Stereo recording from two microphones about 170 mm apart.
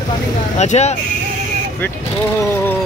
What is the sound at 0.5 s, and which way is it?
Speech, 40° left (ahead or behind).